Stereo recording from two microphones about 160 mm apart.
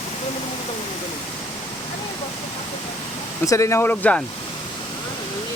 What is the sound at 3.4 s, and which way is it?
Speech, 20° left (ahead or behind).